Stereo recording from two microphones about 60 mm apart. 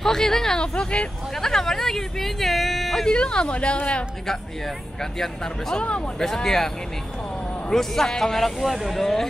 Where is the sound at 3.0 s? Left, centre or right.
Centre.